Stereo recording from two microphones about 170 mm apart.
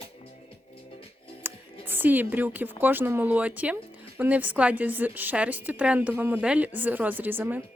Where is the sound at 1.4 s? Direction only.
15° right (ahead or behind).